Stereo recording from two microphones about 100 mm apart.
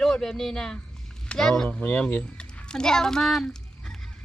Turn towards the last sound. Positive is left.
turn(degrees=5)  # may be behind; listen again after turning